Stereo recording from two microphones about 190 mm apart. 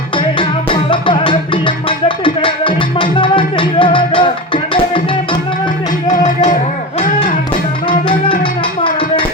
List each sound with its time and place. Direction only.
0.2 s music: 25° left (ahead or behind)
6.1 s music: 40° left (ahead or behind)